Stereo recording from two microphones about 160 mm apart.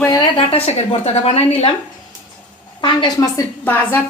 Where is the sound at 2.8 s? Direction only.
30° left (ahead or behind).